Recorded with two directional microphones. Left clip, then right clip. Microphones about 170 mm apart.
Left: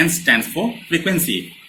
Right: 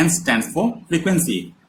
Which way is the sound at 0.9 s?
45° right (ahead or behind).